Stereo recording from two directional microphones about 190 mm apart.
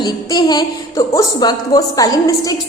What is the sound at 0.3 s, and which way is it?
A woman's voice, 20° left (ahead or behind).